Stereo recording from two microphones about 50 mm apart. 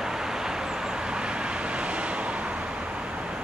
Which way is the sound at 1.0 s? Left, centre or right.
Centre.